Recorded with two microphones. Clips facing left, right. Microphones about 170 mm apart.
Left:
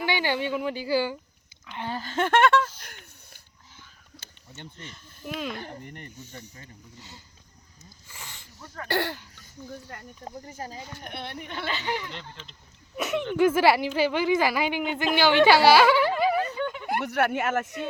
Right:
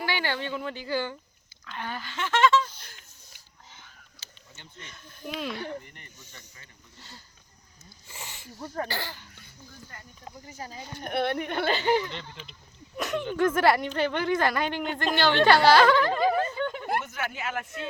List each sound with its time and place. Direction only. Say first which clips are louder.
0.0 s speech: left 4 dB; 15° left (ahead or behind)
1.9 s speech: left 6 dB; 40° left (ahead or behind); by 3.4 s 60° left (ahead or behind)
4.2 s a sound: left 8 dB; 55° left (ahead or behind)
5.2 s speech: left 1 dB; 5° left (ahead or behind)
5.5 s speech: right 1 dB; 50° left (ahead or behind)
8.1 s speech: right 2 dB; 15° right (ahead or behind)
8.5 s speech: right 8 dB; 35° right (ahead or behind)
8.9 s speech: left 8 dB; 65° left (ahead or behind)
10.2 s speech: left 3 dB; 40° left (ahead or behind)
11.1 s speech: right 11 dB; 65° right (ahead or behind)
11.6 s speech: right 6 dB; 35° right (ahead or behind)
12.4 s speech: right 1 dB; 10° right (ahead or behind)
13.3 s speech: left 2 dB; 10° left (ahead or behind)
17.0 s speech: left 9 dB; 65° left (ahead or behind); by 17.7 s 50° left (ahead or behind)